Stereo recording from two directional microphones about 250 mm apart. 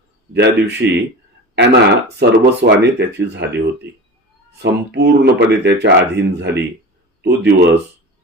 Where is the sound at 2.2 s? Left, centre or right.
Right.